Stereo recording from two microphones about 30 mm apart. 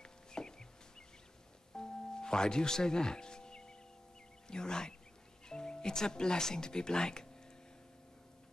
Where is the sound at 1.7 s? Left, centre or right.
Left.